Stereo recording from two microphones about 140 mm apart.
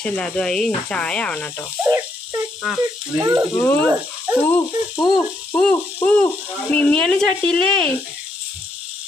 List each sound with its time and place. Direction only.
0.0 s speech: 5° left (ahead or behind)
1.8 s dog: 20° right (ahead or behind)
3.2 s speech: 20° right (ahead or behind)
3.6 s speech: 15° left (ahead or behind)
5.0 s a sound: 25° left (ahead or behind)
5.7 s speech: 15° left (ahead or behind)